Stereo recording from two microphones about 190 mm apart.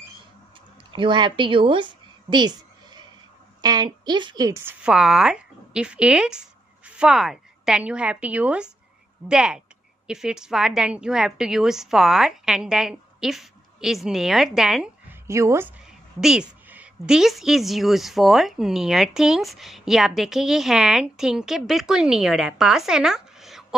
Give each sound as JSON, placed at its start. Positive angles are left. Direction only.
{"t": 0.9, "sound": "a woman's voice", "side_deg": -25}
{"t": 4.8, "sound": "a woman's voice", "side_deg": -5}
{"t": 15.2, "sound": "a woman's voice", "side_deg": -15}
{"t": 16.2, "sound": "a woman's voice", "side_deg": -5}